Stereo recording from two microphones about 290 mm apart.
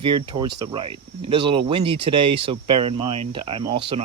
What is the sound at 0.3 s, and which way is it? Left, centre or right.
Speech, centre.